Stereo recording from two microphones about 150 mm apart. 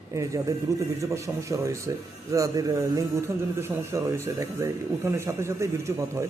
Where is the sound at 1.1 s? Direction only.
20° right (ahead or behind).